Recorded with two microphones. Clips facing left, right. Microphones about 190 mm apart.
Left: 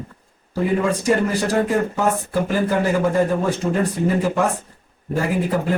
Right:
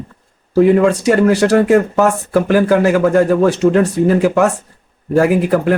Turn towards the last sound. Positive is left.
turn(degrees=-85)